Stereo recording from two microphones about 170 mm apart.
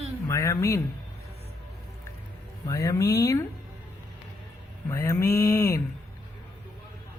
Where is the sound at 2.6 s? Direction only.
20° left (ahead or behind).